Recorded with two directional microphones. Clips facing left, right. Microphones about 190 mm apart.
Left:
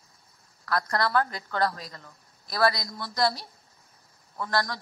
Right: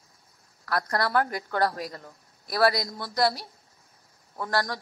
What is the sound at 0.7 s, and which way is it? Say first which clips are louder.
A woman's voice: even; 35° right (ahead or behind).